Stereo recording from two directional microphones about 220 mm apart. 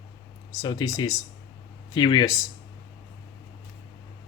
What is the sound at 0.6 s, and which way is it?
Speech, 20° left (ahead or behind).